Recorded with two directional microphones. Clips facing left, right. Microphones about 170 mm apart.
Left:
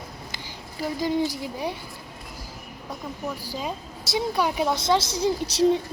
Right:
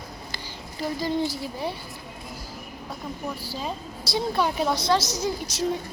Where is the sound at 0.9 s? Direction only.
15° left (ahead or behind).